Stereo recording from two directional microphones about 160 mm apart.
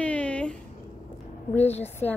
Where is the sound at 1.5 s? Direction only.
40° left (ahead or behind).